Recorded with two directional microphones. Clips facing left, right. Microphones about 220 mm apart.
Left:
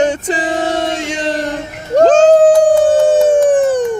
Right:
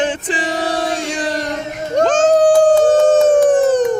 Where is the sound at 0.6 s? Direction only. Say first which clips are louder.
Left 2 dB; 25° left (ahead or behind).